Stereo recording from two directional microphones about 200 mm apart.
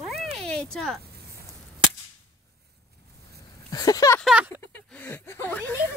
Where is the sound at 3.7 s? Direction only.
15° left (ahead or behind).